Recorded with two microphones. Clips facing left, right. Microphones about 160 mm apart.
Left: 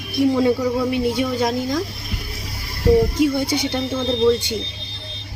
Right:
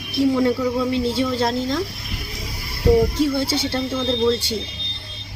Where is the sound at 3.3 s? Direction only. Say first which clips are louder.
Left 1 dB; 15° left (ahead or behind).